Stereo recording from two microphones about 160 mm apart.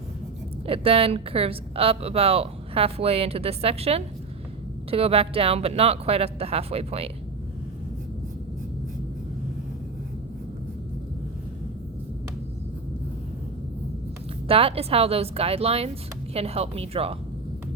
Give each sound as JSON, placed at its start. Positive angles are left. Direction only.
{"t": 0.7, "sound": "a woman's voice", "side_deg": -35}
{"t": 14.4, "sound": "a woman's voice", "side_deg": -35}